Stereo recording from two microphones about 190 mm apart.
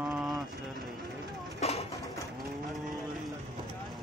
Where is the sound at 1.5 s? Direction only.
35° left (ahead or behind).